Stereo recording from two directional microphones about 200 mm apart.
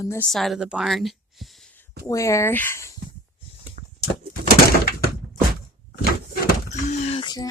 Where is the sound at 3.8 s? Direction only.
40° right (ahead or behind).